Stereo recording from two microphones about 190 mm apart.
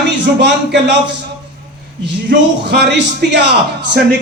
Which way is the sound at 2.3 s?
60° right (ahead or behind).